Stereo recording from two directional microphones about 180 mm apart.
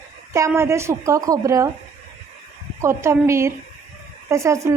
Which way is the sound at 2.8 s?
15° right (ahead or behind).